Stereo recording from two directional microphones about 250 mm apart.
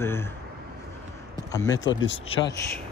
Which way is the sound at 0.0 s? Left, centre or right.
Centre.